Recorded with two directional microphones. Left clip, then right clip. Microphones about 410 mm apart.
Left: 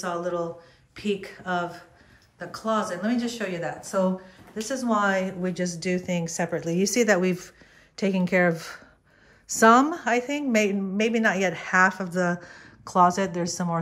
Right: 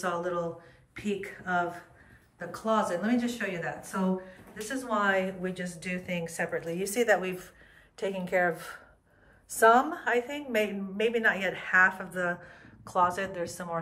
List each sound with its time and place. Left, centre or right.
0.0 s a woman's voice: centre
10.0 s speech: centre